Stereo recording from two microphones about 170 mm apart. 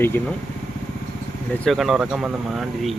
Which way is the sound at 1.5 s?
5° left (ahead or behind).